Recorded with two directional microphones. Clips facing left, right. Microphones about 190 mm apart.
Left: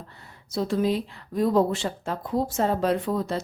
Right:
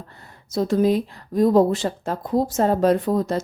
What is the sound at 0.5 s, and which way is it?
A woman's voice, 45° right (ahead or behind).